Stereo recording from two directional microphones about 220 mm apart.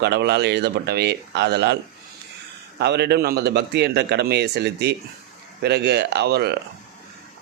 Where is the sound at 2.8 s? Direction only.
50° right (ahead or behind).